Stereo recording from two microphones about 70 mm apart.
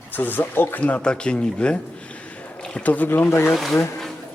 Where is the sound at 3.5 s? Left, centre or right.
Centre.